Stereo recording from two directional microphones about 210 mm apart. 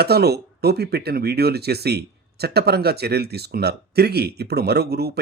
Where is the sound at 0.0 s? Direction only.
50° right (ahead or behind).